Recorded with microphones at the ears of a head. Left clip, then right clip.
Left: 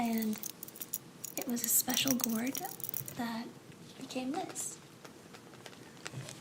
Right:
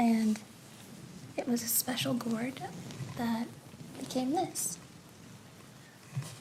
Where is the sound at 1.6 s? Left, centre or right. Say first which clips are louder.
Left 1 dB; centre.